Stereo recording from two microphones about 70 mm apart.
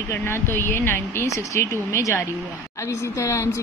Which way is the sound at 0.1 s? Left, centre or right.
Left.